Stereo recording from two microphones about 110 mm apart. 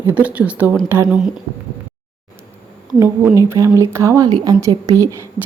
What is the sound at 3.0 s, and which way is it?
Speech, 25° right (ahead or behind).